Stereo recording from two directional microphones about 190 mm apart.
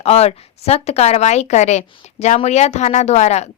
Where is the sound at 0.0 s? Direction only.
35° left (ahead or behind).